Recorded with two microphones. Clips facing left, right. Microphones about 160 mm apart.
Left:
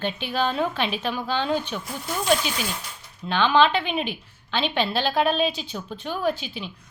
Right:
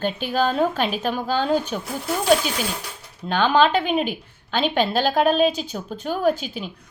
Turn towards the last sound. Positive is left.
turn(degrees=-45)  # may be behind; listen again after turning